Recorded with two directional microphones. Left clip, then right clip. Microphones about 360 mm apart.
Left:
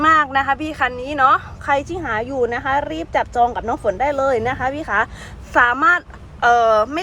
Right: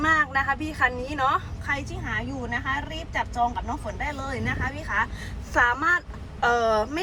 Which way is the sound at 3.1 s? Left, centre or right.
Left.